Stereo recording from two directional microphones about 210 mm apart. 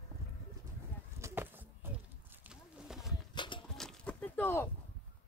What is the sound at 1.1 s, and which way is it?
Chop, 10° right (ahead or behind).